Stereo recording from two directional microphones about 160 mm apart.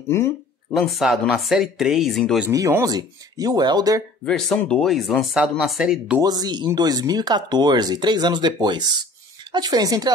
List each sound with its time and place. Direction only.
0.1 s a sound: 15° left (ahead or behind)
0.7 s speech: centre (ahead or behind)
2.5 s speech: 20° right (ahead or behind)
4.3 s speech: 5° left (ahead or behind)
6.2 s speech: 25° right (ahead or behind)